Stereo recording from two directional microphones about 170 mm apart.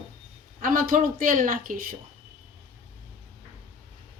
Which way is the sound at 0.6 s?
55° right (ahead or behind).